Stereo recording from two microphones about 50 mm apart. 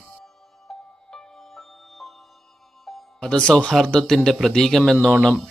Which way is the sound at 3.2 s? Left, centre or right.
Centre.